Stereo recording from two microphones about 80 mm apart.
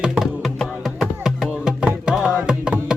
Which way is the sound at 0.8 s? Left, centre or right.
Centre.